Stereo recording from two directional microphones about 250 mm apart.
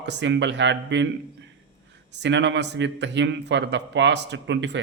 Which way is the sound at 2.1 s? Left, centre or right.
Right.